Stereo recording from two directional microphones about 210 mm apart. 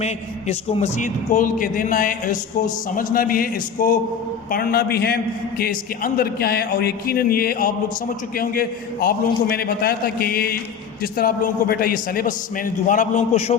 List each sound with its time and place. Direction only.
0.0 s a man's voice: 30° left (ahead or behind)